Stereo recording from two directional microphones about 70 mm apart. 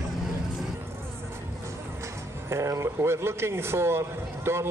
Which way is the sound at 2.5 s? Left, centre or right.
Right.